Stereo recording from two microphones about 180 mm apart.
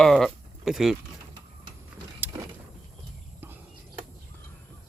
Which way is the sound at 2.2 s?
10° right (ahead or behind).